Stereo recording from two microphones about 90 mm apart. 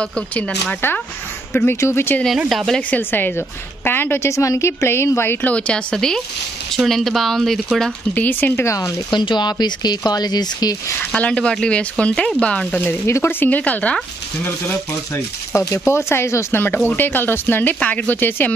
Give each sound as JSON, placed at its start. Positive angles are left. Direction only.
{"t": 0.0, "sound": "speech", "side_deg": 15}
{"t": 1.5, "sound": "speech", "side_deg": 25}
{"t": 2.2, "sound": "speech", "side_deg": 0}
{"t": 2.9, "sound": "speech", "side_deg": 20}
{"t": 5.5, "sound": "speech", "side_deg": 10}
{"t": 8.1, "sound": "speech", "side_deg": 20}
{"t": 8.5, "sound": "speech", "side_deg": 35}
{"t": 9.1, "sound": "speech", "side_deg": 55}
{"t": 11.1, "sound": "speech", "side_deg": 10}
{"t": 15.5, "sound": "speech", "side_deg": 35}